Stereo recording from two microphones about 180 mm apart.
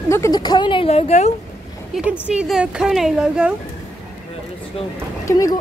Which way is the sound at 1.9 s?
5° right (ahead or behind).